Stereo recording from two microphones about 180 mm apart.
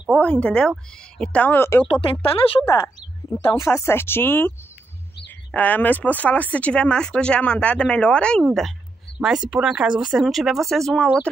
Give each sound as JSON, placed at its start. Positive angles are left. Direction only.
{"t": 0.1, "sound": "speech", "side_deg": 5}
{"t": 2.0, "sound": "speech", "side_deg": 30}
{"t": 2.6, "sound": "speech", "side_deg": 15}